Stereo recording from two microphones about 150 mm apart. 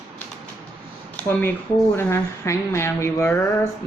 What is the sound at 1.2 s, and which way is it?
A woman's voice, 15° left (ahead or behind).